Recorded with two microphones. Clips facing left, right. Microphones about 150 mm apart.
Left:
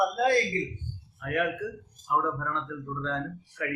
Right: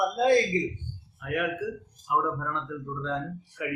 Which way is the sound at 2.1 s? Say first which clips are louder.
Right 1 dB; 10° right (ahead or behind).